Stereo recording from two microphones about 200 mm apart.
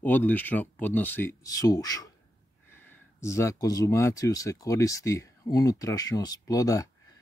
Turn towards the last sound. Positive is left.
turn(degrees=15)  # may be behind; listen again after turning